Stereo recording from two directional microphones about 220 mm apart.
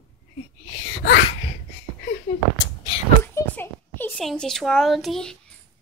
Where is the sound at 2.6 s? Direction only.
20° left (ahead or behind); by 5.4 s centre (ahead or behind).